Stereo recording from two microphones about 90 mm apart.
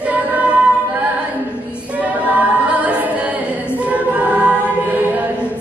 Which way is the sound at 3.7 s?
15° right (ahead or behind).